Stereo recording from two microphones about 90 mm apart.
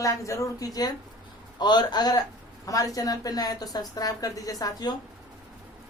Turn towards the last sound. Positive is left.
turn(degrees=45)  # may be behind; listen again after turning